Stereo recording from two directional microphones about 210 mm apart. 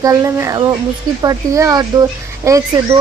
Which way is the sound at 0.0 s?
15° right (ahead or behind).